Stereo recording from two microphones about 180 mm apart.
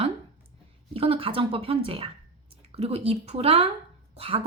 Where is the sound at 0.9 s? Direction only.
30° right (ahead or behind).